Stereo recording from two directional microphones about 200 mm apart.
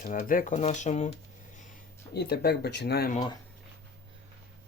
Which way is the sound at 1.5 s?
40° left (ahead or behind).